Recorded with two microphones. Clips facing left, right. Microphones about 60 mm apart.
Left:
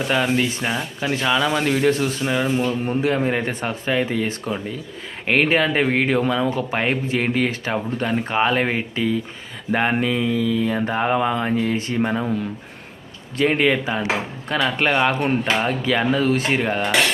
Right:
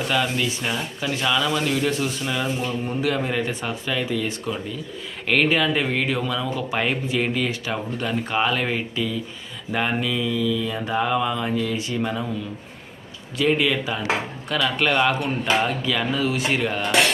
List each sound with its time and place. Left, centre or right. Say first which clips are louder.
0.1 s speech: left 4 dB; left
1.4 s speech: left 3 dB; left
13.3 s speech: left 2 dB; left